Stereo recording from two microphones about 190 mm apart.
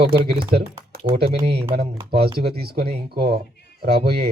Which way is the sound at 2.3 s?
55° right (ahead or behind).